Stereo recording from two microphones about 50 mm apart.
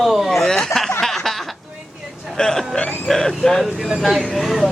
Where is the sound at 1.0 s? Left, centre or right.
Centre.